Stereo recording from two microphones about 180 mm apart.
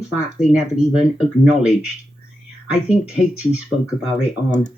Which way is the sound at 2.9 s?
5° right (ahead or behind).